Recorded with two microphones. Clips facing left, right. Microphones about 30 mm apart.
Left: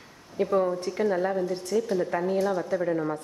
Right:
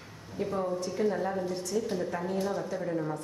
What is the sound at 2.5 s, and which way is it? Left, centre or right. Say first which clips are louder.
Speech: left 6 dB; left.